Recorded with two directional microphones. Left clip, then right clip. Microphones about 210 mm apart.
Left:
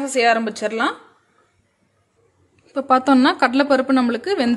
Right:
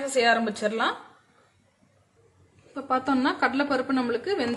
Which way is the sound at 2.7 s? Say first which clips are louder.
Left 10 dB; 50° left (ahead or behind).